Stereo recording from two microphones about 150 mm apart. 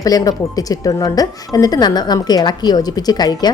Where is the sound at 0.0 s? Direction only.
25° left (ahead or behind).